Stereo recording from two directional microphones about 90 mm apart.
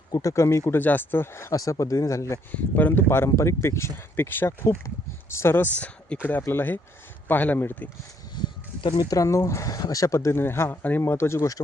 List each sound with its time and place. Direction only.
0.1 s speech: 35° left (ahead or behind)
0.6 s speech: 20° left (ahead or behind)
2.5 s speech: 20° left (ahead or behind)
8.4 s speech: 50° left (ahead or behind); by 11.4 s 30° left (ahead or behind)